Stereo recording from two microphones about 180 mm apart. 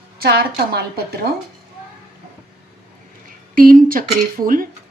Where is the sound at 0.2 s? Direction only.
60° right (ahead or behind).